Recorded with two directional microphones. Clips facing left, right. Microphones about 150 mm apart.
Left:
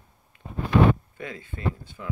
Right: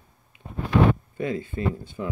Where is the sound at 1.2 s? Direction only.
30° right (ahead or behind).